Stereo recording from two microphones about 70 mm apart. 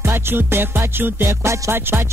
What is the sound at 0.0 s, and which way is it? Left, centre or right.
Music, right.